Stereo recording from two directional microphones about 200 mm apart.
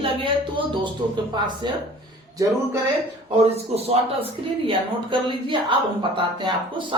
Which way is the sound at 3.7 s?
30° right (ahead or behind).